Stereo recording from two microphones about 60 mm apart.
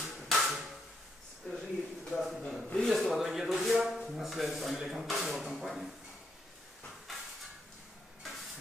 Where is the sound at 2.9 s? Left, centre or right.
Centre.